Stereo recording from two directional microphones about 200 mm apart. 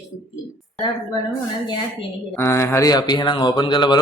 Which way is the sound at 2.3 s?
10° left (ahead or behind).